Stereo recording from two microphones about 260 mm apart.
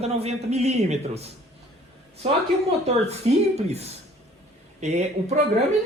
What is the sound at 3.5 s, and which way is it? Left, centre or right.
A woman's voice, right.